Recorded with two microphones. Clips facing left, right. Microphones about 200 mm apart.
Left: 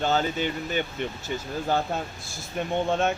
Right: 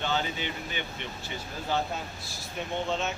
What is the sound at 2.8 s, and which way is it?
Speech, 55° left (ahead or behind).